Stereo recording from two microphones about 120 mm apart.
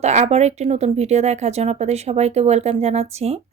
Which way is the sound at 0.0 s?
70° right (ahead or behind).